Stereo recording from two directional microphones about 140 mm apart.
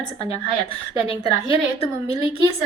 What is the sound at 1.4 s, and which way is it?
Speech, 40° left (ahead or behind).